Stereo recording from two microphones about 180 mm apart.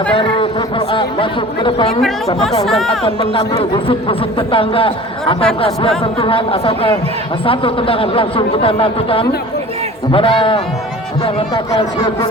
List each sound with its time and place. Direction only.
0.1 s a man's voice: 30° left (ahead or behind)
2.0 s speech: centre (ahead or behind)
3.0 s a man's voice: 30° left (ahead or behind)